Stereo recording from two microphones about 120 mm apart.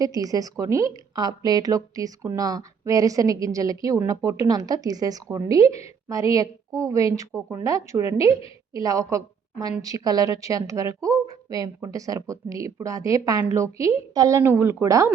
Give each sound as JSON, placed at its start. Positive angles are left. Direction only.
{"t": 0.0, "sound": "a woman's voice", "side_deg": -30}